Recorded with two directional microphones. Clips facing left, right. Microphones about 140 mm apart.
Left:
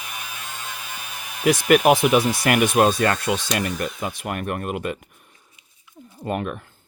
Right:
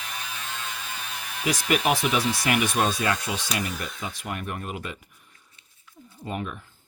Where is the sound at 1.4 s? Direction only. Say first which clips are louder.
Left 8 dB; 60° left (ahead or behind).